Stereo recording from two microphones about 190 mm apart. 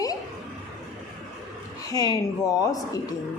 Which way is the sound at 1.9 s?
20° left (ahead or behind).